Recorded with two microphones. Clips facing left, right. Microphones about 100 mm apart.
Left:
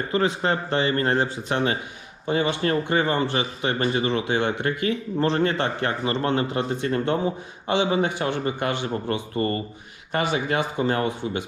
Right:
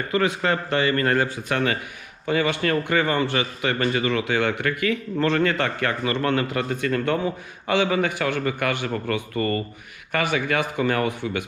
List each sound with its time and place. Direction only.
0.1 s speech: 25° left (ahead or behind)